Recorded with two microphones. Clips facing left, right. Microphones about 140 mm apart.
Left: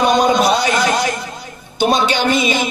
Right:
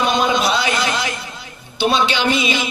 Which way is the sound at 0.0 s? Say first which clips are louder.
Left 4 dB; 45° left (ahead or behind).